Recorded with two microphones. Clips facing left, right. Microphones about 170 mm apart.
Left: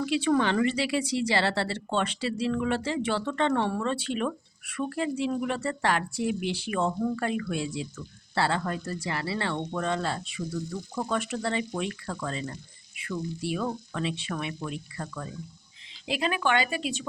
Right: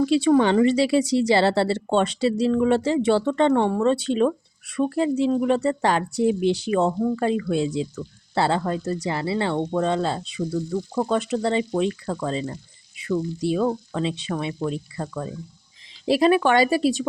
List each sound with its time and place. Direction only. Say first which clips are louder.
0.0 s speech: right 7 dB; 30° right (ahead or behind)
16.1 s speech: right 9 dB; 35° right (ahead or behind)